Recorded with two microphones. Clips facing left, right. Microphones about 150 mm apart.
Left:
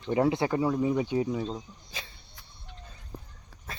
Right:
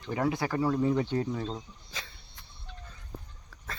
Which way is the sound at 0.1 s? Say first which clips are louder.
Left 4 dB; 25° left (ahead or behind).